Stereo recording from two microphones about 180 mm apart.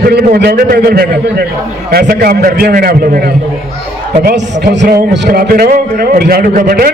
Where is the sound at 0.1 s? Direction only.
65° right (ahead or behind).